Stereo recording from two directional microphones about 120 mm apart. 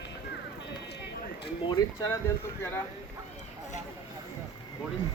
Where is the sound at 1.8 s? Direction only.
30° left (ahead or behind).